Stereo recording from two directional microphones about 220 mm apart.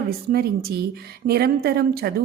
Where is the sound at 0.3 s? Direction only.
45° right (ahead or behind).